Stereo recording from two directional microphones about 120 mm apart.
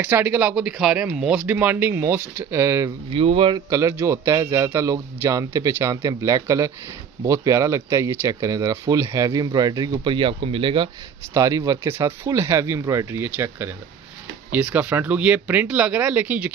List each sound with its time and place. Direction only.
0.0 s speech: 15° right (ahead or behind)
3.1 s speech: 50° right (ahead or behind)
3.5 s speech: 25° right (ahead or behind); by 10.9 s 45° right (ahead or behind)
11.3 s speech: 30° right (ahead or behind); by 16.5 s 10° right (ahead or behind)